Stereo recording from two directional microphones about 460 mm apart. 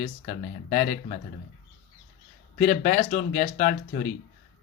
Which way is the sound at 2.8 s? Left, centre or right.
Centre.